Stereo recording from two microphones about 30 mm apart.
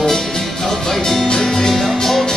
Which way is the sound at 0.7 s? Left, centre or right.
Centre.